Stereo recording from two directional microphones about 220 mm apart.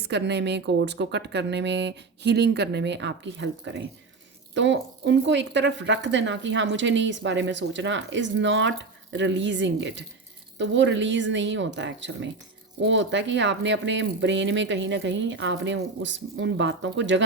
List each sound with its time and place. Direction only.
0.1 s speech: 50° right (ahead or behind)